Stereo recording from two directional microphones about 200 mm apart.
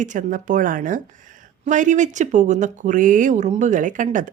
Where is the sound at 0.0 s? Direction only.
40° right (ahead or behind).